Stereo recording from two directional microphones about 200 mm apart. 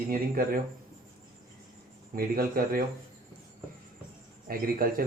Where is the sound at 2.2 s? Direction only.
50° right (ahead or behind).